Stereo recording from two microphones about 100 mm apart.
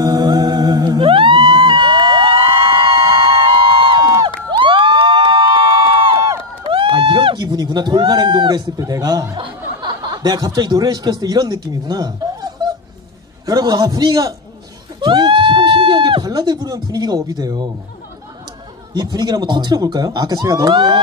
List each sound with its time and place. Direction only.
0.0 s music: 40° right (ahead or behind); by 3.3 s 60° right (ahead or behind)
3.8 s crowd: 60° right (ahead or behind)
6.7 s a sound: 65° right (ahead or behind); by 9.4 s 35° right (ahead or behind)
9.8 s speech: 50° right (ahead or behind)
13.5 s speech: 40° right (ahead or behind)
15.0 s a sound: 55° right (ahead or behind)
18.9 s speech: 45° right (ahead or behind)
20.7 s speech: 55° right (ahead or behind)